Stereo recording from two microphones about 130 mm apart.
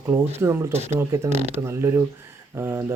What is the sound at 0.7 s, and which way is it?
Speech, 55° right (ahead or behind).